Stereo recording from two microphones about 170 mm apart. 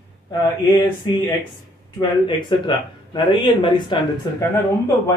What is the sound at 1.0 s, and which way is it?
Speech, 25° left (ahead or behind).